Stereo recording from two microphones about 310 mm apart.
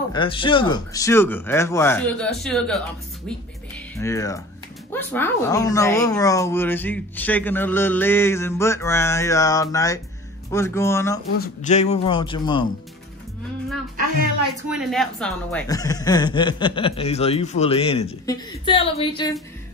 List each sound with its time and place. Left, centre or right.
0.1 s speech: centre
3.9 s speech: centre
11.3 s speech: left
14.7 s speech: centre